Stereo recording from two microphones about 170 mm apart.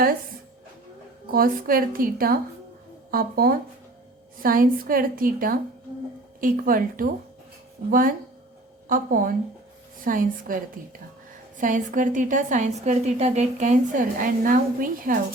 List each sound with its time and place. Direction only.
1.3 s a woman's voice: 60° right (ahead or behind)